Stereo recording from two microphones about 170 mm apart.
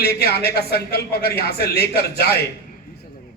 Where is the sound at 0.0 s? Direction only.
65° left (ahead or behind).